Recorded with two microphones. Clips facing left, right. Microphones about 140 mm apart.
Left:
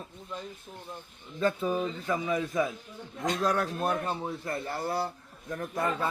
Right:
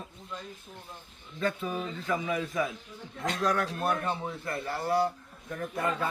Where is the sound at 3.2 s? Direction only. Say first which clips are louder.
Left 2 dB; 15° left (ahead or behind).